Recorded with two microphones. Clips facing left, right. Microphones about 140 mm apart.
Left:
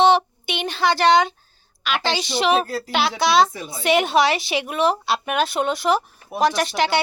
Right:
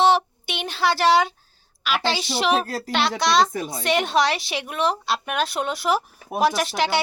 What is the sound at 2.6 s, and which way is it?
Speech, 40° right (ahead or behind).